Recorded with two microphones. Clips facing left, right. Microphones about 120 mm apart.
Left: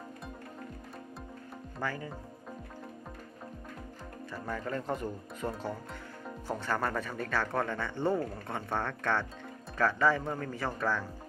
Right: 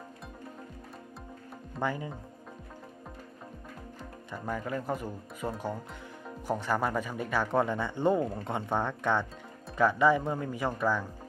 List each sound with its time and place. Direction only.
1.8 s speech: 20° right (ahead or behind)
4.4 s speech: 10° right (ahead or behind)